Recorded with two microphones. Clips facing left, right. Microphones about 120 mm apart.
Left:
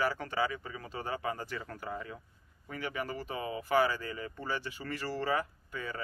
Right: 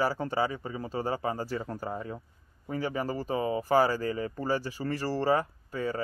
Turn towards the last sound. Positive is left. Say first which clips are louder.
# right 8 dB
turn(degrees=-35)  # may be behind; listen again after turning